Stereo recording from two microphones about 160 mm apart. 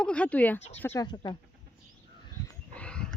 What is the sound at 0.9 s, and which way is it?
Speech, 25° left (ahead or behind).